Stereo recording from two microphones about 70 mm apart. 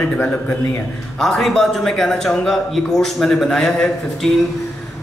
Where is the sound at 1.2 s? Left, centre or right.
Centre.